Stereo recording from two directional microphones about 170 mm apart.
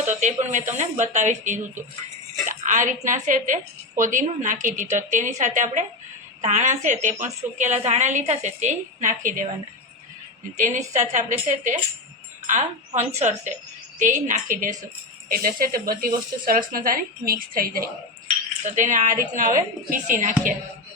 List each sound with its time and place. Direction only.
0.0 s a woman's voice: 45° right (ahead or behind)
10.6 s a woman's voice: 45° right (ahead or behind)
18.6 s a woman's voice: 45° right (ahead or behind)